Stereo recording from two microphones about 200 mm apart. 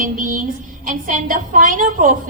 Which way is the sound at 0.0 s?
40° right (ahead or behind).